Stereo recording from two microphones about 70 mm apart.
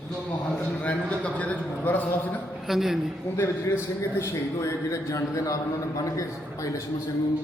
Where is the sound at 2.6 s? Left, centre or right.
Centre.